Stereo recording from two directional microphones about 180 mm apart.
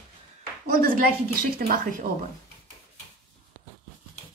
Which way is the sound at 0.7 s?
50° right (ahead or behind).